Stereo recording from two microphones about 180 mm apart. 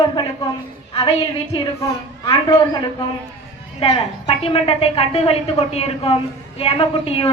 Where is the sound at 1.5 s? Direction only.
20° left (ahead or behind).